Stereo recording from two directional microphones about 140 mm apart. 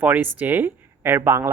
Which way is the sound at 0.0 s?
10° right (ahead or behind).